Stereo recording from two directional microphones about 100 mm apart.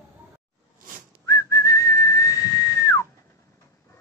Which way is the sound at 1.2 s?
35° left (ahead or behind).